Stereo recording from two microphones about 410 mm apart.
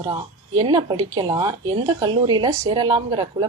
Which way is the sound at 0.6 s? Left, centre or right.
Centre.